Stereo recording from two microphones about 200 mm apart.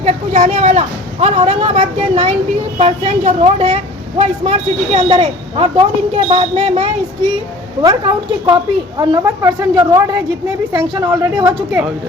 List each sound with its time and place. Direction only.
0.0 s a woman's voice: 35° right (ahead or behind)
7.8 s a woman's voice: 20° right (ahead or behind)